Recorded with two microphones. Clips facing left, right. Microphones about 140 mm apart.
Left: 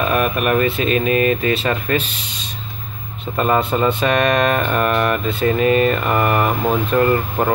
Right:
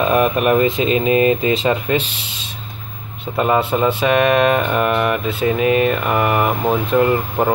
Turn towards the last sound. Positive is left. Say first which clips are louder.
# right 1 dB
turn(degrees=-10)  # may be behind; listen again after turning